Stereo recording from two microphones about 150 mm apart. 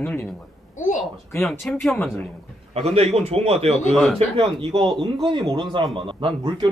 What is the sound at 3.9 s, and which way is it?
Speech, centre (ahead or behind).